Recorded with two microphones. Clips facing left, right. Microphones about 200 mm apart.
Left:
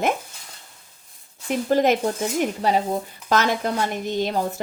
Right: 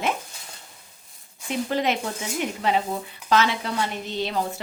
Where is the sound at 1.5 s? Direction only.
45° left (ahead or behind).